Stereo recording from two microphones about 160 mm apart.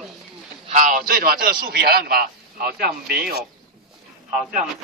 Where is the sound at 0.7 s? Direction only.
55° right (ahead or behind); by 3.4 s 75° right (ahead or behind).